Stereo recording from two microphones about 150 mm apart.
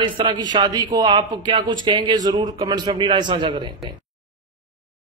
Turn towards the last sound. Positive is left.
turn(degrees=-30)  # may be behind; listen again after turning